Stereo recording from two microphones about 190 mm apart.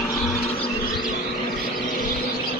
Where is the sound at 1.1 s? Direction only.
40° left (ahead or behind).